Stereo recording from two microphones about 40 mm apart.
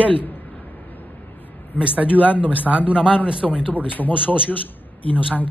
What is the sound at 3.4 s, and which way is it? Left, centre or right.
A man's voice, left.